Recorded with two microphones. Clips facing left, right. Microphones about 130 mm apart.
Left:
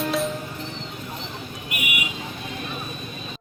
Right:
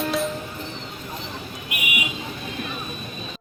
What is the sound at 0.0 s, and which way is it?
Music, centre (ahead or behind).